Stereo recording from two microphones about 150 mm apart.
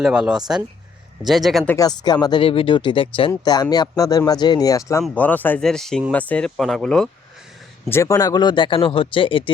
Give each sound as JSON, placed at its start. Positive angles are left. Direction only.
{"t": 0.0, "sound": "speech", "side_deg": -5}
{"t": 1.6, "sound": "speech", "side_deg": 20}
{"t": 7.9, "sound": "speech", "side_deg": 20}